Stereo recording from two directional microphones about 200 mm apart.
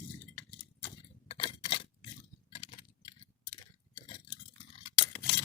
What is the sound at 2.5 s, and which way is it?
Tick-tock, 30° left (ahead or behind).